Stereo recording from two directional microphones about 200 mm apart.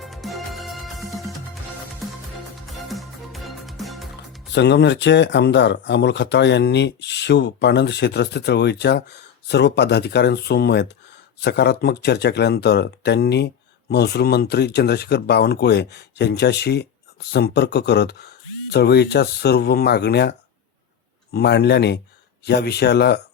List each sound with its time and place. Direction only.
0.0 s music: centre (ahead or behind)
2.6 s music: centre (ahead or behind)
4.5 s speech: 60° left (ahead or behind)
21.3 s speech: 55° left (ahead or behind)